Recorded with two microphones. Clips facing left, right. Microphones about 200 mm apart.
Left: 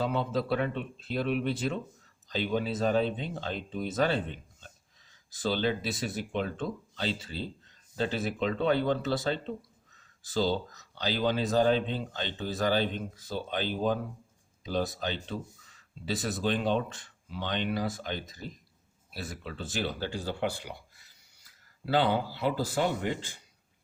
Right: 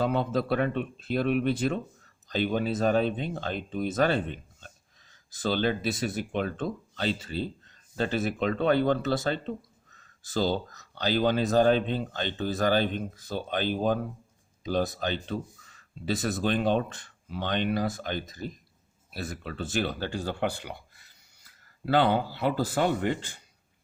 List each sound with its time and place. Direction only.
0.0 s speech: 55° right (ahead or behind)